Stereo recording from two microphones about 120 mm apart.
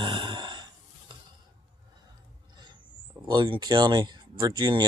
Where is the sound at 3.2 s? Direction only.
40° right (ahead or behind).